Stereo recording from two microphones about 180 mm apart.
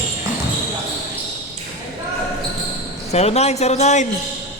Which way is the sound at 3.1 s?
35° left (ahead or behind).